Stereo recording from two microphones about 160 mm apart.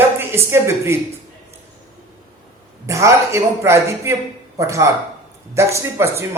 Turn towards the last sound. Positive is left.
turn(degrees=-15)  # may be behind; listen again after turning